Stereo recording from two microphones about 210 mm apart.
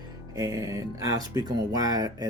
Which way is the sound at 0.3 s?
15° right (ahead or behind).